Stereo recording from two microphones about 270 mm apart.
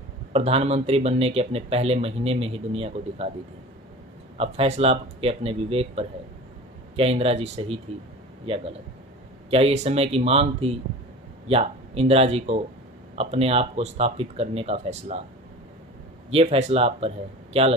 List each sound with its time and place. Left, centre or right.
0.3 s speech: right
4.4 s speech: right
9.5 s speech: right
16.3 s speech: right